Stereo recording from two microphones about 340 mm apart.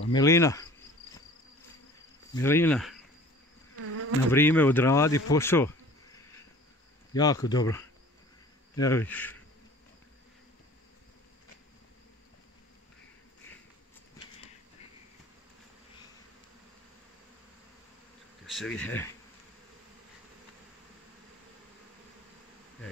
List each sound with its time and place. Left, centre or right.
0.1 s speech: centre
2.3 s insect: centre
3.8 s insect: right
4.3 s speech: centre
7.2 s speech: centre
8.7 s insect: centre
18.5 s insect: centre